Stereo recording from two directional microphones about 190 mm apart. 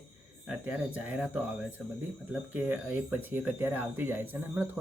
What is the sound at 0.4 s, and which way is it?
Speech, 5° right (ahead or behind).